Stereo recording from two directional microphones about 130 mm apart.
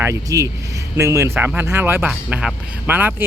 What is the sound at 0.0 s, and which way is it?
Speech, 25° right (ahead or behind).